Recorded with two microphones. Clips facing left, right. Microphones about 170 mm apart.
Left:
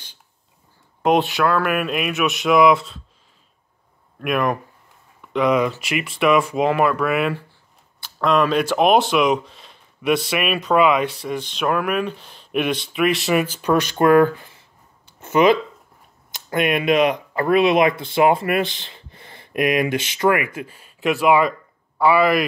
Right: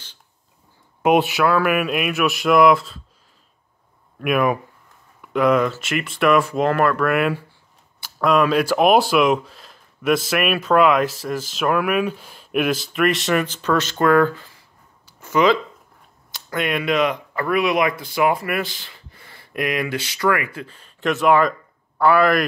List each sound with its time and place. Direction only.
1.0 s speech: 10° right (ahead or behind)
4.2 s speech: 5° right (ahead or behind); by 14.6 s 20° left (ahead or behind)
15.1 s a sound: 25° left (ahead or behind)
16.3 s speech: 20° left (ahead or behind); by 22.4 s centre (ahead or behind)